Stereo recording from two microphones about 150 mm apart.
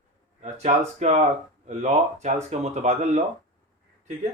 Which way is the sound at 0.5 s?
50° right (ahead or behind).